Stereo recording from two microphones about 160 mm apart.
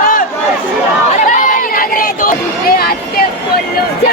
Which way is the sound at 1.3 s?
55° left (ahead or behind).